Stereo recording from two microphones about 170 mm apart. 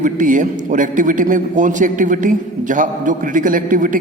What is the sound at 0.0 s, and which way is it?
A man's voice, 50° right (ahead or behind).